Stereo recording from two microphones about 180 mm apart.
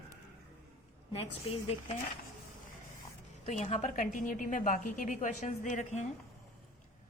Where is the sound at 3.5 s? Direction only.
40° left (ahead or behind).